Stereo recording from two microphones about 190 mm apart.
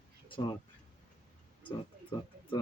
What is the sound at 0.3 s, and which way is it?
Speech, 25° left (ahead or behind).